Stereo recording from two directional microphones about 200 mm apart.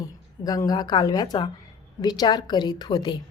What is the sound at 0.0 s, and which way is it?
A woman's voice, 15° left (ahead or behind).